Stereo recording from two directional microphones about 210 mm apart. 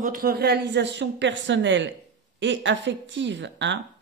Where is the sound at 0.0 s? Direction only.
45° right (ahead or behind).